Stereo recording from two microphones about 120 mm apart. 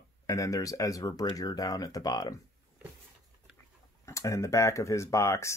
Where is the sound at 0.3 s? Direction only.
30° left (ahead or behind).